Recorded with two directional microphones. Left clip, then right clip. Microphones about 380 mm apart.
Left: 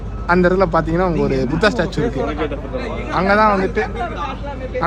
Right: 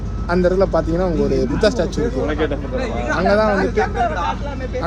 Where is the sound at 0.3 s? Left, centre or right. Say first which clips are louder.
Left 2 dB; centre.